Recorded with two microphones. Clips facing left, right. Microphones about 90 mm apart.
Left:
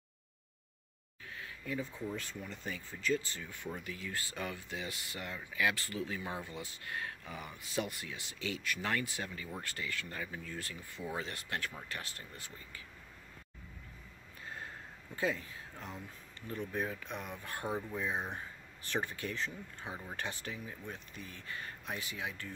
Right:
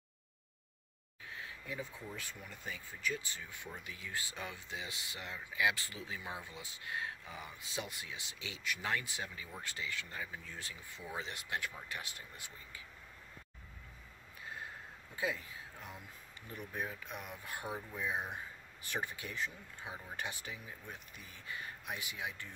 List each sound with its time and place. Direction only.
1.7 s speech: 10° right (ahead or behind)
14.4 s a sound: 10° right (ahead or behind)
15.1 s speech: 10° right (ahead or behind)